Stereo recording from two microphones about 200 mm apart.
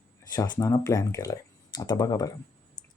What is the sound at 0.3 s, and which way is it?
Speech, 20° left (ahead or behind).